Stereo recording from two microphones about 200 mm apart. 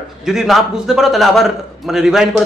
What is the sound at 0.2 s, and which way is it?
A man's voice, centre (ahead or behind).